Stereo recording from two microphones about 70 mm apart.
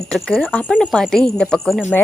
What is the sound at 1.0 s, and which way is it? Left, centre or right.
Speech, centre.